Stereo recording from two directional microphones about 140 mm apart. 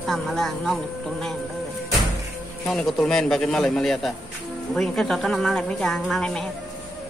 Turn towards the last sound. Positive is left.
turn(degrees=5)  # may be behind; listen again after turning